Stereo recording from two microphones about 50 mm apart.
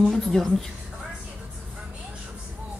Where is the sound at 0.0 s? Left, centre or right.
Centre.